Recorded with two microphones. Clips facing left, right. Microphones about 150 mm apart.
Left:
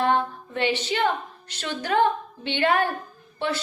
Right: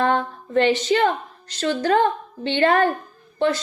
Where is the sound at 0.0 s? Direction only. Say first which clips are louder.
Right 2 dB; 45° right (ahead or behind).